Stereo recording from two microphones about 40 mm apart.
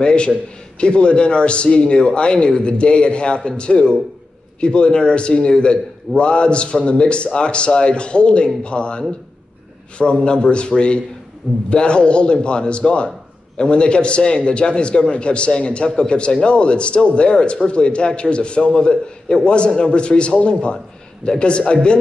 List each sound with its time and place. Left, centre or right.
0.0 s a man's voice: left
11.7 s a man's voice: left
20.7 s a sound: centre
21.4 s a man's voice: left